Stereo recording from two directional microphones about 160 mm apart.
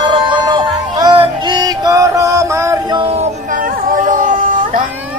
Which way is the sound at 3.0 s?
40° right (ahead or behind).